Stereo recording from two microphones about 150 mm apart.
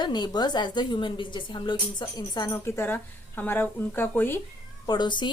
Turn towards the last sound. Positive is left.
turn(degrees=30)  # may be behind; listen again after turning